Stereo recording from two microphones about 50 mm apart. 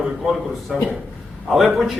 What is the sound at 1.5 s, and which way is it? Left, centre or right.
Speech, centre.